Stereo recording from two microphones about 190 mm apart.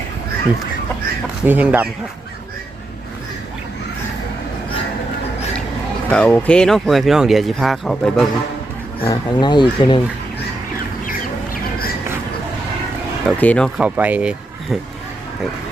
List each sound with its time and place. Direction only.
1.5 s speech: 10° right (ahead or behind)
6.1 s speech: 5° left (ahead or behind)
9.0 s speech: 25° left (ahead or behind)
13.2 s speech: 5° left (ahead or behind)
13.7 s speech: 10° right (ahead or behind)